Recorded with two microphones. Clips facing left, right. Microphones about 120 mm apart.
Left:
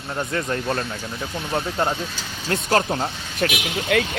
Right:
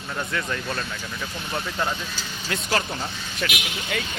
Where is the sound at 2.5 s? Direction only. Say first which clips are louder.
Left 6 dB; 45° left (ahead or behind).